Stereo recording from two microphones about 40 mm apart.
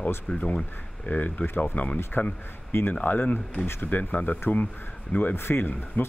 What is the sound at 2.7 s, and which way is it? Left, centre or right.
Speech, left.